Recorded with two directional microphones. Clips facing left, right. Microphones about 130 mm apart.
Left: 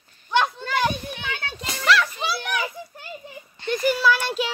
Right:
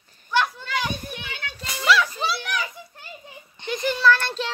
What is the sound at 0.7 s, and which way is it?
Children playing, 50° left (ahead or behind).